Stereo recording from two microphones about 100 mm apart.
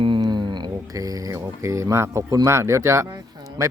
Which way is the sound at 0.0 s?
50° right (ahead or behind).